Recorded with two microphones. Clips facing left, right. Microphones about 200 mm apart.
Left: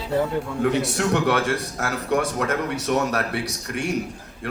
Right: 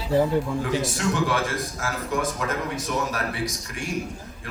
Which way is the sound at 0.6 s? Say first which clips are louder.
Left 3 dB; 65° left (ahead or behind).